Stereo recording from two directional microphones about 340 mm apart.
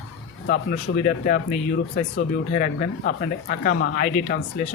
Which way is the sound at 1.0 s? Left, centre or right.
Left.